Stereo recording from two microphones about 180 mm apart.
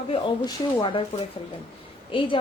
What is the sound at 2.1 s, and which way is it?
Speech, 30° left (ahead or behind).